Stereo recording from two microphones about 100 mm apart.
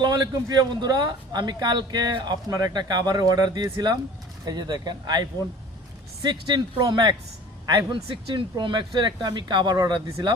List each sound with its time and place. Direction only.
0.0 s speech: 40° right (ahead or behind)